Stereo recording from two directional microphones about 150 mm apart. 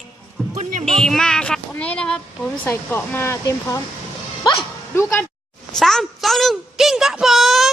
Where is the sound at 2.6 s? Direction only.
15° left (ahead or behind).